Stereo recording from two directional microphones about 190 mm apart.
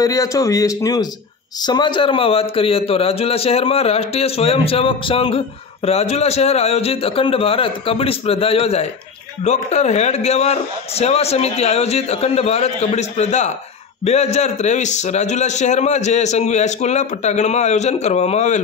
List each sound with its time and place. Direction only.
0.0 s a man's voice: 20° left (ahead or behind); by 18.6 s 35° left (ahead or behind)